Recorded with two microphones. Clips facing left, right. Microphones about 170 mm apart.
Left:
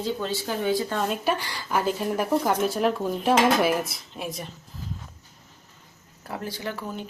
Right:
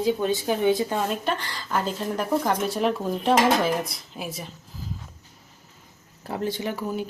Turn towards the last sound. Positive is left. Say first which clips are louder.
# right 4 dB
turn(degrees=-20)  # may be behind; listen again after turning